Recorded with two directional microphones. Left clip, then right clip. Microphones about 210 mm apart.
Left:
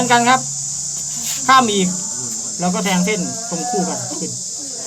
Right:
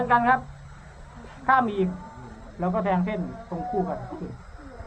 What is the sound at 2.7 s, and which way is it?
Cricket, 35° right (ahead or behind).